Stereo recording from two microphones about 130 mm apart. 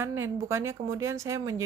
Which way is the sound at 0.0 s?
20° right (ahead or behind).